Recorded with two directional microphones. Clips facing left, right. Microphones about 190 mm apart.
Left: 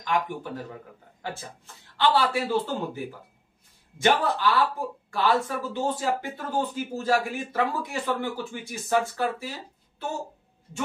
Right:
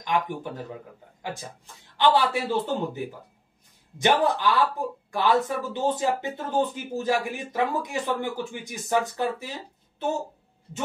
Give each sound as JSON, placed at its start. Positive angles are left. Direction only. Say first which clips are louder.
{"t": 0.0, "sound": "speech", "louder": "right 1 dB", "side_deg": -15}
{"t": 2.0, "sound": "speech", "louder": "right 1 dB", "side_deg": -15}
{"t": 4.0, "sound": "speech", "louder": "right 1 dB", "side_deg": -15}